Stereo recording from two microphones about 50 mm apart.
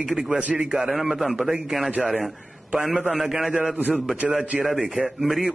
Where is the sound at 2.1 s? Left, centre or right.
Centre.